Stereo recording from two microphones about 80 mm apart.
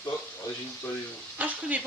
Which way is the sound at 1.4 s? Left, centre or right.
Centre.